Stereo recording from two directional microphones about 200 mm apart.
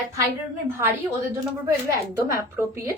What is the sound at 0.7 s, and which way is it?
Speech, 15° right (ahead or behind).